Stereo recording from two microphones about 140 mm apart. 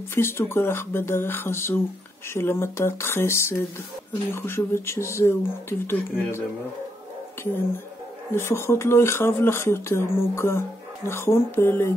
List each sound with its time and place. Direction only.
0.1 s speech: 15° left (ahead or behind)
8.4 s speech: 20° left (ahead or behind)